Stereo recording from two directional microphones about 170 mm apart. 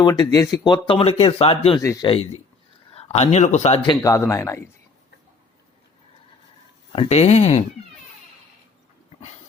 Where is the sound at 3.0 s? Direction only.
40° left (ahead or behind).